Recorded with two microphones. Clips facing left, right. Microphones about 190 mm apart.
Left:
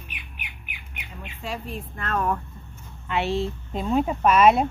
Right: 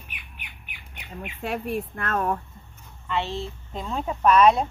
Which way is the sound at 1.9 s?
55° right (ahead or behind).